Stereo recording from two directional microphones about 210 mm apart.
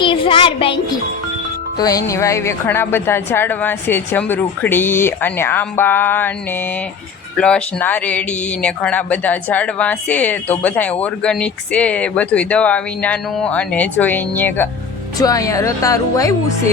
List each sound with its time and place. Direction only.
0.0 s a child's voice: 25° left (ahead or behind)
1.8 s a woman's voice: 15° left (ahead or behind)
7.3 s a woman's voice: 5° left (ahead or behind)